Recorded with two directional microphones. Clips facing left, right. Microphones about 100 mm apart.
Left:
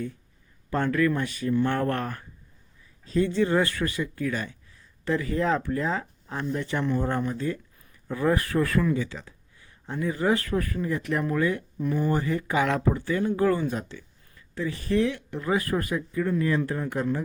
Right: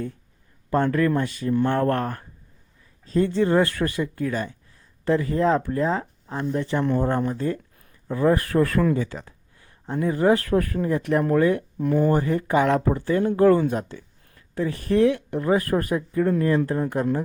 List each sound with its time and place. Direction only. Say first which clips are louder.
0.7 s speech: right 3 dB; 35° right (ahead or behind)
7.3 s speech: right 3 dB; 45° right (ahead or behind)